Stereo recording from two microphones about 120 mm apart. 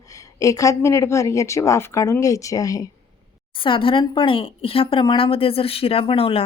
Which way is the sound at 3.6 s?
45° left (ahead or behind).